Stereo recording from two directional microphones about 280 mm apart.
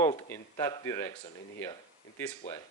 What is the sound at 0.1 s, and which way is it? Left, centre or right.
Speech, centre.